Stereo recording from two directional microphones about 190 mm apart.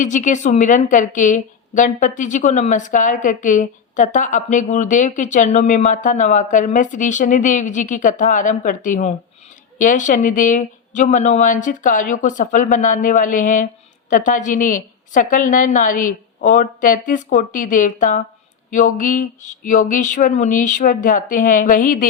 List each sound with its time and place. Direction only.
0.0 s a woman's voice: 40° left (ahead or behind)